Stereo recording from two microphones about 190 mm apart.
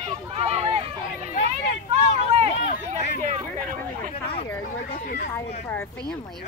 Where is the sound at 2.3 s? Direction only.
35° right (ahead or behind).